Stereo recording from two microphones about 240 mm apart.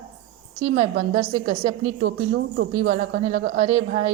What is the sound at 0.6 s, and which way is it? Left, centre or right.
A woman's voice, right.